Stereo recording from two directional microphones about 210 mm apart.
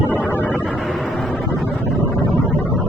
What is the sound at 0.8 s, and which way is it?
Vehicle, centre (ahead or behind).